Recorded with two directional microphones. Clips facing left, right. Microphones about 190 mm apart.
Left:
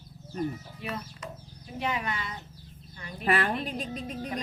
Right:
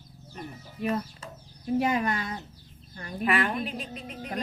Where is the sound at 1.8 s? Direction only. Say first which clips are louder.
Right 2 dB; 45° right (ahead or behind).